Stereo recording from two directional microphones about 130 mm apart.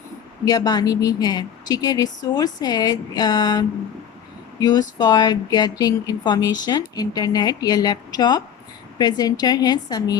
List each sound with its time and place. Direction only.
0.4 s speech: 30° left (ahead or behind)